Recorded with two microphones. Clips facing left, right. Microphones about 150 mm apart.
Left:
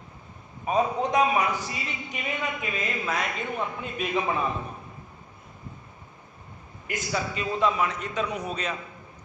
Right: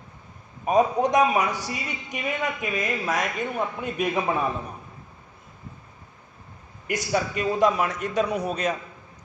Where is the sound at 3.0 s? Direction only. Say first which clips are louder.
Right 2 dB; 45° right (ahead or behind).